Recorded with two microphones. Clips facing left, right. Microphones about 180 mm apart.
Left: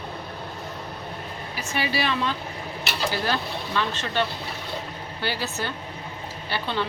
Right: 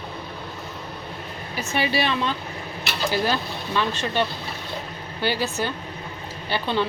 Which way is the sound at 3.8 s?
15° right (ahead or behind).